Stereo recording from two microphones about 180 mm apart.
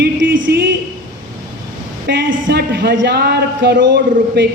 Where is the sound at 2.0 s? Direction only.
70° right (ahead or behind).